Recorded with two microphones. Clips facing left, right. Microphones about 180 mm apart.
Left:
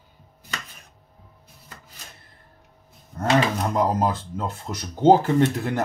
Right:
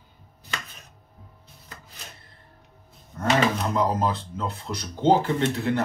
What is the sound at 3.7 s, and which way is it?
Speech, 45° left (ahead or behind).